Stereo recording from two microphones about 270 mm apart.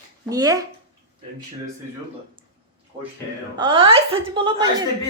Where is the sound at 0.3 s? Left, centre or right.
Centre.